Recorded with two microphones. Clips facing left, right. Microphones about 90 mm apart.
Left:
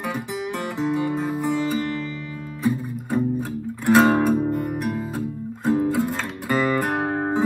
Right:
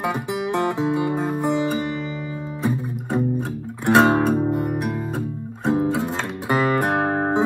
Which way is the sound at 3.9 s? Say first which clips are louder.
Even; 20° right (ahead or behind).